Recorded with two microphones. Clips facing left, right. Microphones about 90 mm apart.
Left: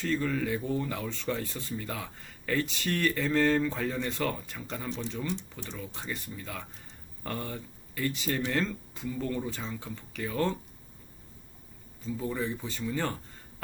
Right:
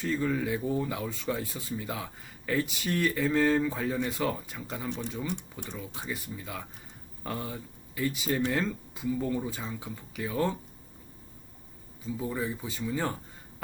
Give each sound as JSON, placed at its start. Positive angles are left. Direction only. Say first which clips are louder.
{"t": 0.0, "sound": "speech", "louder": "right 1 dB", "side_deg": -10}
{"t": 5.3, "sound": "speech", "louder": "left 1 dB", "side_deg": -55}
{"t": 5.6, "sound": "speech", "louder": "right 2 dB", "side_deg": -10}
{"t": 12.0, "sound": "speech", "louder": "even", "side_deg": -10}